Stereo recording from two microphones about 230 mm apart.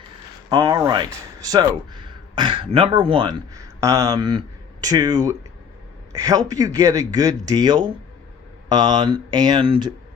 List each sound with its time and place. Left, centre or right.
0.5 s speech: centre